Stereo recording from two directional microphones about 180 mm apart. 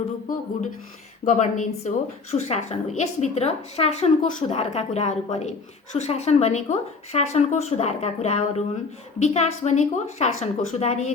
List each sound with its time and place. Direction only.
1.2 s a woman's voice: 40° left (ahead or behind)